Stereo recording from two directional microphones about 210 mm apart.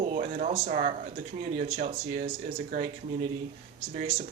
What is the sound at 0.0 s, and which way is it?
Speech, 35° right (ahead or behind).